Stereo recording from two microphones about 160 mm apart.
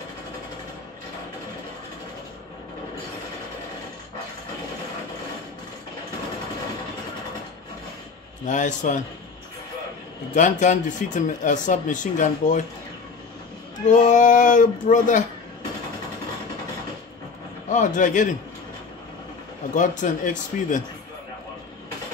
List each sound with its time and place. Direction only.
8.5 s speech: 50° left (ahead or behind)
10.3 s speech: 50° left (ahead or behind)
13.8 s speech: 50° left (ahead or behind)
17.6 s speech: 50° left (ahead or behind)
19.7 s speech: 50° left (ahead or behind)